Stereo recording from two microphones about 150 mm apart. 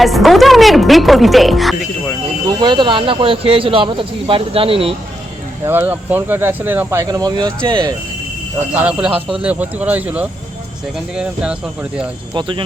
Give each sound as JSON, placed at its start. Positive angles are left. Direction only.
{"t": 0.0, "sound": "speech", "side_deg": 0}
{"t": 2.5, "sound": "speech", "side_deg": -30}
{"t": 5.6, "sound": "speech", "side_deg": -15}
{"t": 7.1, "sound": "speech", "side_deg": -25}
{"t": 8.7, "sound": "speech", "side_deg": -5}
{"t": 12.3, "sound": "speech", "side_deg": -35}